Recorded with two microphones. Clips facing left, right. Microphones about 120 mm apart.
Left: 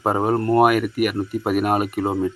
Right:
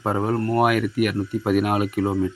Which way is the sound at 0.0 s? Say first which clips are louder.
Left 3 dB; 10° left (ahead or behind).